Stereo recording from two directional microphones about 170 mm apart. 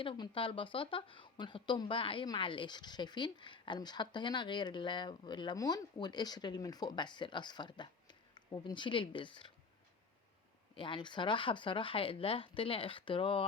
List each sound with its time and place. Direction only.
0.0 s speech: 30° left (ahead or behind)
10.8 s speech: 30° left (ahead or behind)